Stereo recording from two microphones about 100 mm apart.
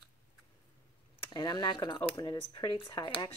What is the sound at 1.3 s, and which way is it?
Speech, 50° left (ahead or behind).